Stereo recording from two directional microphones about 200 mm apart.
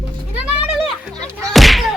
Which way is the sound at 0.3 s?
5° right (ahead or behind).